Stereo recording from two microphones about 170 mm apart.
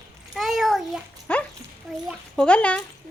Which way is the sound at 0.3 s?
Centre (ahead or behind).